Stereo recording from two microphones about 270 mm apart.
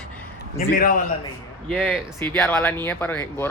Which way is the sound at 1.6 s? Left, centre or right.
Centre.